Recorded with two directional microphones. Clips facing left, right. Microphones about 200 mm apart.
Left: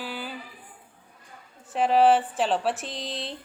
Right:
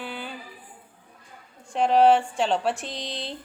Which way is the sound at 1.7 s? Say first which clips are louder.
Right 1 dB; 5° left (ahead or behind).